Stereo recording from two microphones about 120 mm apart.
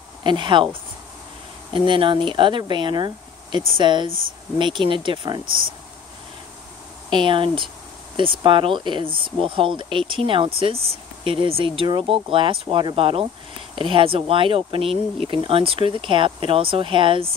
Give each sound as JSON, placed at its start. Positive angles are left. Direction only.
{"t": 0.2, "sound": "speech", "side_deg": -40}
{"t": 1.7, "sound": "speech", "side_deg": -45}
{"t": 7.1, "sound": "speech", "side_deg": -45}